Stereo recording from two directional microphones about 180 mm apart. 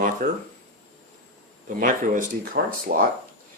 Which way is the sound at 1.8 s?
50° right (ahead or behind).